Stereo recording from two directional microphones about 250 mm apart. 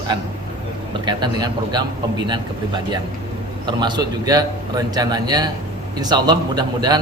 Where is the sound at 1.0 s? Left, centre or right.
Centre.